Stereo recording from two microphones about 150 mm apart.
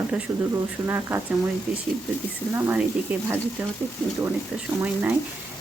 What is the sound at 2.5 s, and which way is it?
Speech, 15° right (ahead or behind).